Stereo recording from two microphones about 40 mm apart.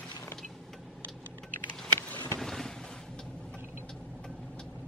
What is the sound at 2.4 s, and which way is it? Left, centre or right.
Boat, centre.